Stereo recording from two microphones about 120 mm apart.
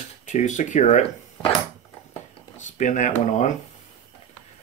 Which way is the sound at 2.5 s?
90° left.